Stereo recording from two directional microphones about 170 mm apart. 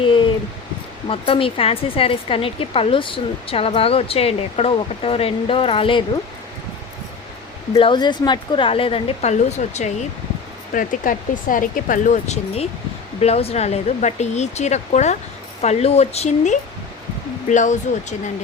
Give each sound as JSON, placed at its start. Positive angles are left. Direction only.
{"t": 1.0, "sound": "speech", "side_deg": 35}
{"t": 7.8, "sound": "speech", "side_deg": 30}
{"t": 10.8, "sound": "speech", "side_deg": 50}